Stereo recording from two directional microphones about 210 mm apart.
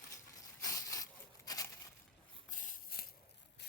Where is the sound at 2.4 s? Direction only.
40° left (ahead or behind).